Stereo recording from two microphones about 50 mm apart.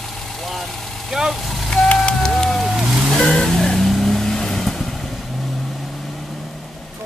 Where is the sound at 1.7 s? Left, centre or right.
Left.